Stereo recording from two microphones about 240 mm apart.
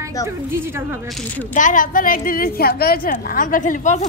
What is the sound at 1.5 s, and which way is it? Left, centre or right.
A woman's voice, left.